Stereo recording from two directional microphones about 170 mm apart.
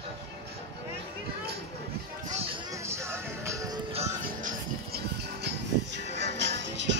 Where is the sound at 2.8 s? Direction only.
15° right (ahead or behind).